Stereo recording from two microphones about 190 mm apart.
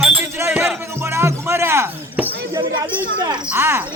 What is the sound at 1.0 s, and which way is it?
Music, 15° right (ahead or behind).